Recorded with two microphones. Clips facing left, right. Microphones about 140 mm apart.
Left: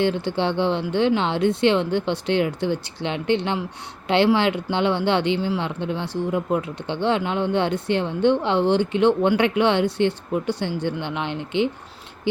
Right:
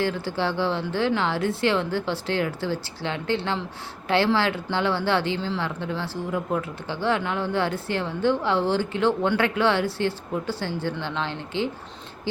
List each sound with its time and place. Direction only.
0.0 s a woman's voice: 20° left (ahead or behind)